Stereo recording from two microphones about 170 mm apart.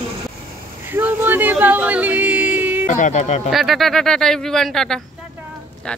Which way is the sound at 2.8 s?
45° left (ahead or behind).